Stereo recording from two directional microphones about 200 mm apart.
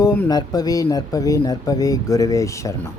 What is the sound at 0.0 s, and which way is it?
Speech, 20° left (ahead or behind).